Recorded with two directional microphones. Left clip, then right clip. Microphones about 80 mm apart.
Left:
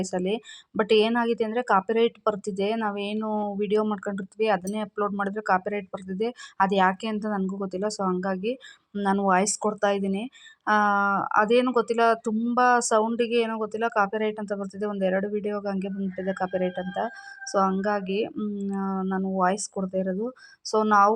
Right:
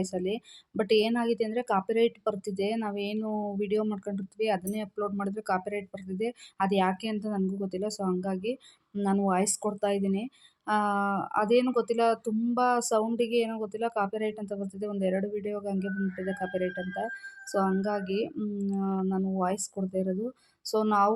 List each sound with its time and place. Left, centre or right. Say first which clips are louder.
0.0 s speech: left 4 dB; left
9.2 s speech: left 7 dB; left